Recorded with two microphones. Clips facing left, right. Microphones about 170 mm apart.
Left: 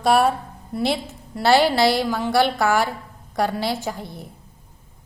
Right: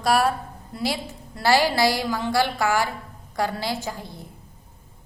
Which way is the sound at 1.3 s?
20° left (ahead or behind).